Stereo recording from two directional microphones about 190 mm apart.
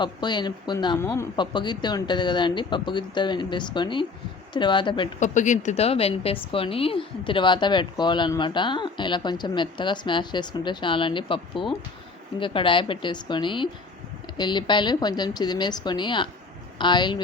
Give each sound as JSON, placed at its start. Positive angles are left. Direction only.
{"t": 0.0, "sound": "a woman's voice", "side_deg": 25}
{"t": 5.2, "sound": "a woman's voice", "side_deg": 40}